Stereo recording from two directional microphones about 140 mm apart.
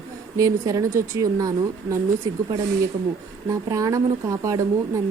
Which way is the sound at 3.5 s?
25° right (ahead or behind).